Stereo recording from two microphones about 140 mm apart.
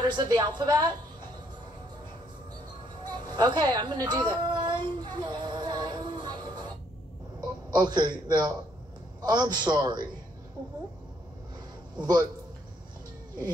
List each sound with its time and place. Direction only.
0.0 s a woman's voice: 30° right (ahead or behind)
3.3 s a sound: 30° right (ahead or behind)
7.7 s a woman's voice: 30° right (ahead or behind)
12.0 s a man's voice: 30° right (ahead or behind)